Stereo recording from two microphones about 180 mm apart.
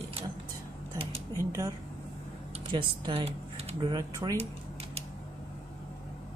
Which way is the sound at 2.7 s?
30° right (ahead or behind).